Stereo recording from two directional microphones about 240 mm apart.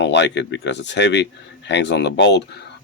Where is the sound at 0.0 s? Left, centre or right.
Left.